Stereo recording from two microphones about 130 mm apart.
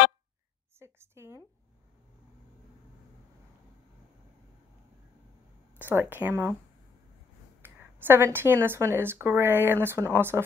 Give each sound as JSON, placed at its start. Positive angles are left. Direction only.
{"t": 0.7, "sound": "a sound", "side_deg": -20}
{"t": 5.8, "sound": "speech", "side_deg": -15}
{"t": 7.6, "sound": "speech", "side_deg": -15}